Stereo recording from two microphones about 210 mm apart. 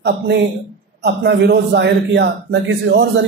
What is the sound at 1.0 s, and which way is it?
A man's voice, 50° right (ahead or behind).